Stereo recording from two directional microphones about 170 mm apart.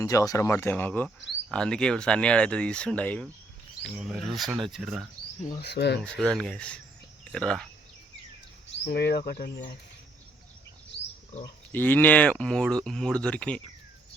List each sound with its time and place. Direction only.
0.0 s speech: 20° left (ahead or behind); by 5.0 s 5° right (ahead or behind)
5.6 s cricket: 80° left
6.1 s speech: 5° left (ahead or behind)
8.9 s cricket: 70° left (ahead or behind)
11.7 s speech: 10° left (ahead or behind)